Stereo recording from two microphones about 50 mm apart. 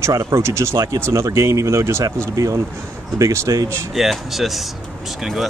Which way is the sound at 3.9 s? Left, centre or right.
Centre.